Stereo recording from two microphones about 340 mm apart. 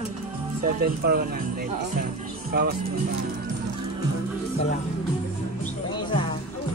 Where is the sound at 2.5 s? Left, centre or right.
Right.